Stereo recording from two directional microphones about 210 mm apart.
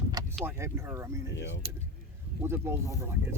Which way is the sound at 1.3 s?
60° left (ahead or behind).